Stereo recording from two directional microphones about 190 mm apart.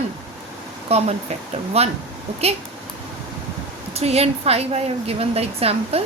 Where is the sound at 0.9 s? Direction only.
35° right (ahead or behind).